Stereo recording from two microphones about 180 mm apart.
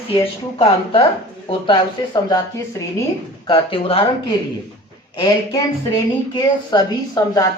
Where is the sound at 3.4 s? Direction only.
30° left (ahead or behind).